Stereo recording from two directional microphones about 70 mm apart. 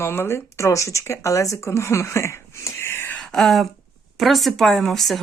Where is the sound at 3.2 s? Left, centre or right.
Centre.